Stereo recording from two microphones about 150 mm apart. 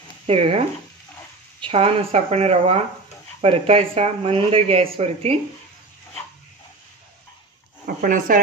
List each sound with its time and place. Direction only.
0.3 s speech: 40° right (ahead or behind)
7.8 s speech: 65° right (ahead or behind)